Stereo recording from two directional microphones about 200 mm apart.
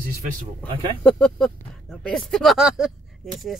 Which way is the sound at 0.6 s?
5° left (ahead or behind).